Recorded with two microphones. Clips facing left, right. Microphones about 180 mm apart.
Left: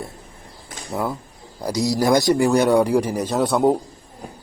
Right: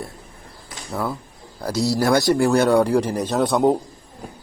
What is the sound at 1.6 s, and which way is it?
A man's voice, 15° left (ahead or behind).